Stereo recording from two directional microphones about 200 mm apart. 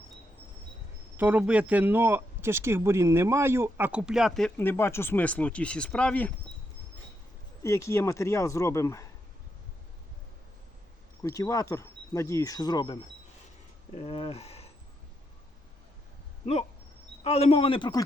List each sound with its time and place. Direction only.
1.1 s speech: 10° right (ahead or behind)
7.6 s speech: 15° left (ahead or behind)
11.2 s speech: 15° left (ahead or behind); by 14.7 s 30° left (ahead or behind)
17.2 s a man's voice: 30° left (ahead or behind)